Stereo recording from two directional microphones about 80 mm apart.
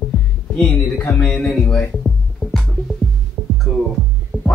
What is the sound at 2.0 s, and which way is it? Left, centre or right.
Music, centre.